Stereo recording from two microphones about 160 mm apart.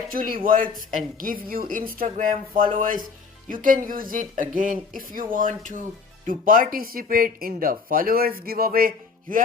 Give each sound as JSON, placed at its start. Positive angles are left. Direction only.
{"t": 0.1, "sound": "speech", "side_deg": -60}